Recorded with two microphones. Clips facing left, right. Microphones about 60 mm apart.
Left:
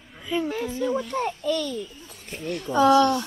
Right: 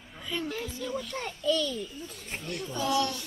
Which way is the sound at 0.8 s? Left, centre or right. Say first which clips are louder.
Left 11 dB; left.